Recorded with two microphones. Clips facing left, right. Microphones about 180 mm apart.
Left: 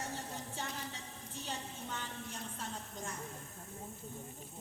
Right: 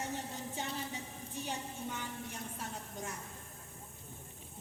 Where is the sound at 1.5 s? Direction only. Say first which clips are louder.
Right 2 dB; 10° right (ahead or behind).